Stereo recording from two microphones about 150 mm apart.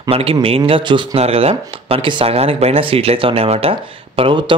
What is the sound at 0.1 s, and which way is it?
Speech, 40° right (ahead or behind).